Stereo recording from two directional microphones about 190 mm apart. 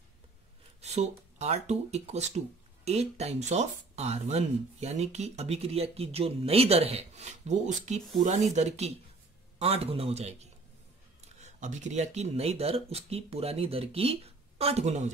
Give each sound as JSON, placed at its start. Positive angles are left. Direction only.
{"t": 0.7, "sound": "speech", "side_deg": -35}